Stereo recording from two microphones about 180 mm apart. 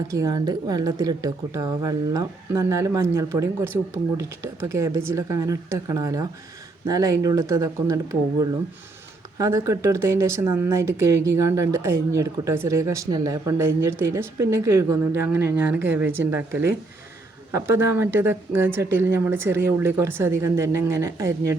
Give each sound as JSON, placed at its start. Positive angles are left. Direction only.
{"t": 0.1, "sound": "a woman's voice", "side_deg": -20}
{"t": 9.4, "sound": "speech", "side_deg": -15}